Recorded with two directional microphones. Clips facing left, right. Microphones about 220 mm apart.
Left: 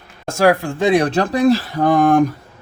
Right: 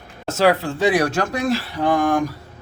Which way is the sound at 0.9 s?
30° left (ahead or behind).